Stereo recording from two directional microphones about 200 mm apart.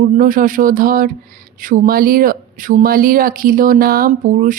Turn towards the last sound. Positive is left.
turn(degrees=-40)  # may be behind; listen again after turning